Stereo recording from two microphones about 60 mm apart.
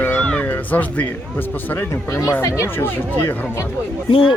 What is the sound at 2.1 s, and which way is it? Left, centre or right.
Speech, left.